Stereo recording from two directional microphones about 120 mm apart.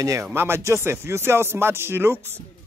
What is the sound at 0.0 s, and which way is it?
Speech, 25° right (ahead or behind).